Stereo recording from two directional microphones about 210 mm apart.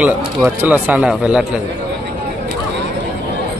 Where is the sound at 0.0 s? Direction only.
10° right (ahead or behind).